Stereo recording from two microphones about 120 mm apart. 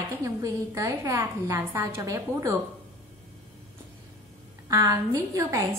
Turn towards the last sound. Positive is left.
turn(degrees=-30)  # may be behind; listen again after turning